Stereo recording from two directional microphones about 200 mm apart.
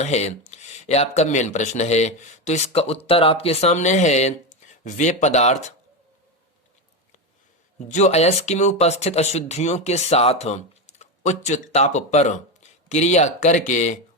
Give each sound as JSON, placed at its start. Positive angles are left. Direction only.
{"t": 0.0, "sound": "speech", "side_deg": 35}
{"t": 7.9, "sound": "speech", "side_deg": 35}